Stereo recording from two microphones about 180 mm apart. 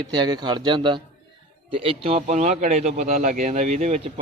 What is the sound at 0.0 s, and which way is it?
A man's voice, 25° right (ahead or behind).